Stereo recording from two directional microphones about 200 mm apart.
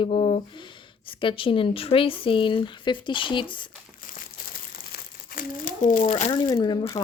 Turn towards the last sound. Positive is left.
turn(degrees=20)  # may be behind; listen again after turning